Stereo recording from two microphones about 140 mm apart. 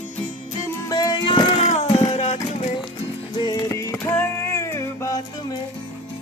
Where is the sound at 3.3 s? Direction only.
30° left (ahead or behind).